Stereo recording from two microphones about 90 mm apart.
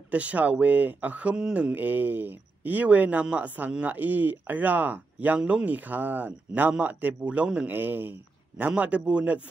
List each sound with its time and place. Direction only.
0.1 s speech: 15° right (ahead or behind)